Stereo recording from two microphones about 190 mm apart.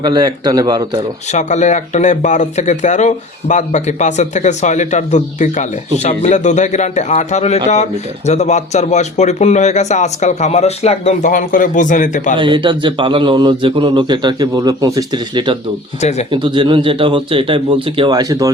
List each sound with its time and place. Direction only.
0.1 s a man's voice: 20° right (ahead or behind)
1.3 s speech: 40° left (ahead or behind)
12.4 s a man's voice: 25° right (ahead or behind)
16.0 s speech: 35° left (ahead or behind)
16.3 s a man's voice: 25° right (ahead or behind)